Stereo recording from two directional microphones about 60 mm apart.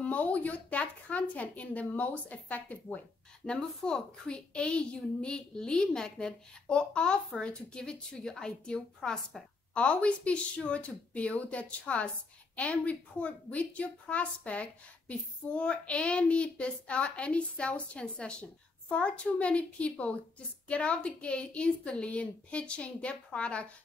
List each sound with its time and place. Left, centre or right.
0.0 s a woman's voice: left
3.4 s a child's voice: centre